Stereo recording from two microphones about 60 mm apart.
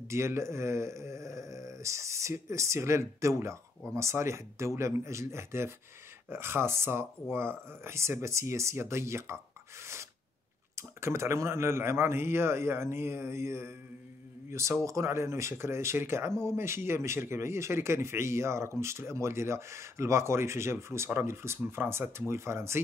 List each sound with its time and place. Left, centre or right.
0.1 s speech: right
10.8 s speech: right